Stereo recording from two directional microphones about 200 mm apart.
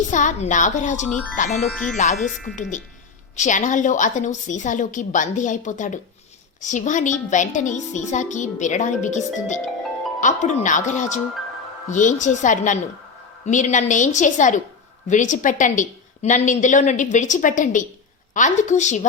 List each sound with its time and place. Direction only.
0.1 s a woman's voice: 40° left (ahead or behind)
1.5 s speech: 5° left (ahead or behind)
2.6 s a woman's voice: 40° left (ahead or behind)